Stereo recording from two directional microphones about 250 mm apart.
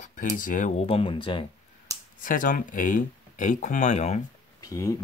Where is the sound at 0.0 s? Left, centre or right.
Left.